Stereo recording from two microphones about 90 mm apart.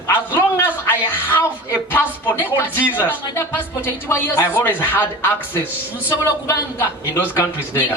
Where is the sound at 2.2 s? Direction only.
20° right (ahead or behind).